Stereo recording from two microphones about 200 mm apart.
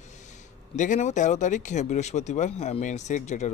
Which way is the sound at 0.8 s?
35° left (ahead or behind).